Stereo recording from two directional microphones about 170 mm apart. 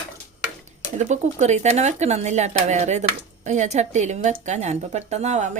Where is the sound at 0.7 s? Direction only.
45° right (ahead or behind).